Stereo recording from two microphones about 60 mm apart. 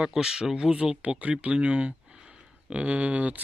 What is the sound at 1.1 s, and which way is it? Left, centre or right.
Speech, right.